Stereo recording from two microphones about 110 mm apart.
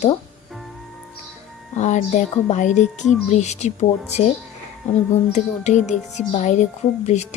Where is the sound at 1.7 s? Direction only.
90° left.